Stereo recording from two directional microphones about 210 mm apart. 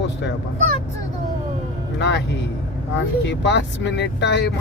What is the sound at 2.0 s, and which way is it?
Speech, 55° left (ahead or behind).